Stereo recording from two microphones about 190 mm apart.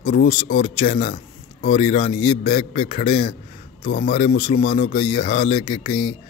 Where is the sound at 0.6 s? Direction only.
30° left (ahead or behind).